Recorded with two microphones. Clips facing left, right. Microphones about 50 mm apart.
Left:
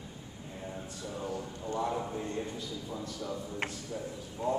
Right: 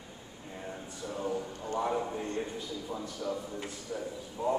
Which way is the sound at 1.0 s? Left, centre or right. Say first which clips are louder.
Right 4 dB; centre.